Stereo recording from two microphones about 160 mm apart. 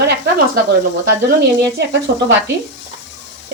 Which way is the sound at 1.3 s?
90° right.